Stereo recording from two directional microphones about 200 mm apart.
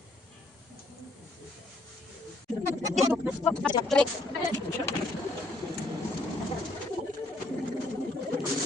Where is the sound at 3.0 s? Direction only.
5° right (ahead or behind).